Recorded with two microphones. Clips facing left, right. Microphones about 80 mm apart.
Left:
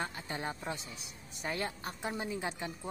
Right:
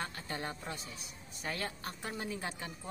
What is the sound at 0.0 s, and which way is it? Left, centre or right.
Speech, centre.